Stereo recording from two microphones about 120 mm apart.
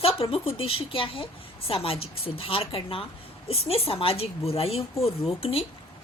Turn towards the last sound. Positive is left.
turn(degrees=55)  # may be behind; listen again after turning